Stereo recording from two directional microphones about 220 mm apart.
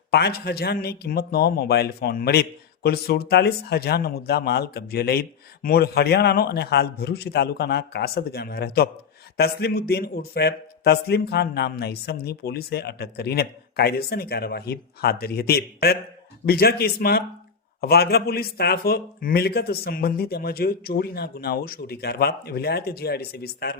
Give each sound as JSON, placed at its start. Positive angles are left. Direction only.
{"t": 0.1, "sound": "a man's voice", "side_deg": 45}